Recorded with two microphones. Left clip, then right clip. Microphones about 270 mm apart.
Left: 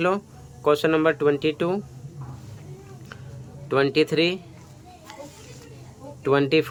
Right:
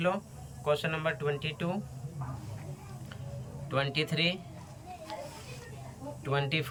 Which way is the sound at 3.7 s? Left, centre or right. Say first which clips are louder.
Left 11 dB; centre.